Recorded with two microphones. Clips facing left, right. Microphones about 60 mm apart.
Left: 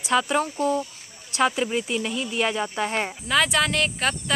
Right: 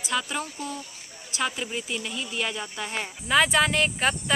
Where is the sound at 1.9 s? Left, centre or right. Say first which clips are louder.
Left 5 dB; left.